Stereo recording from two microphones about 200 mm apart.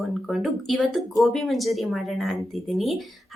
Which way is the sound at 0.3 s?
Centre (ahead or behind).